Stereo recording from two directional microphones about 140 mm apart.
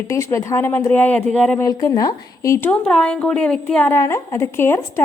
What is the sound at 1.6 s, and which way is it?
Speech, 25° left (ahead or behind).